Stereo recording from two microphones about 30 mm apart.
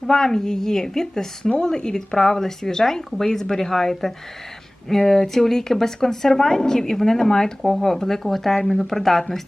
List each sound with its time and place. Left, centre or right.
0.1 s speech: centre